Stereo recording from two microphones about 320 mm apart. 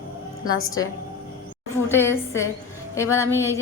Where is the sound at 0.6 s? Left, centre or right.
Left.